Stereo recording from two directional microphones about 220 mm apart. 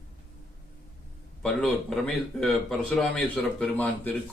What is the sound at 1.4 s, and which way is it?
A man's voice, 5° left (ahead or behind).